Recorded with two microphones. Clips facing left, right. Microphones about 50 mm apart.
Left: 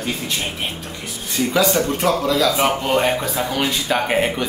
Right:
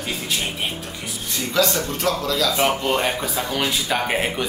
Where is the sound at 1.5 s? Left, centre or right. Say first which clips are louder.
Left 3 dB; centre.